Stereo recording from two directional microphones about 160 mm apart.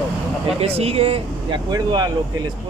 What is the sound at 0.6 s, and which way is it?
Speech, 40° right (ahead or behind).